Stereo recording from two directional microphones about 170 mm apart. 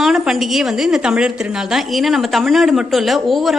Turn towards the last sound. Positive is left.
turn(degrees=0)  # may be behind; listen again after turning